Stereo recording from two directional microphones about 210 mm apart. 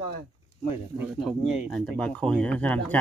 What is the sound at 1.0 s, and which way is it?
Speech, centre (ahead or behind).